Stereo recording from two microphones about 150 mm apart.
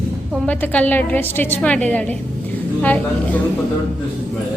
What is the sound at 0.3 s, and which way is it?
A woman's voice, 10° left (ahead or behind).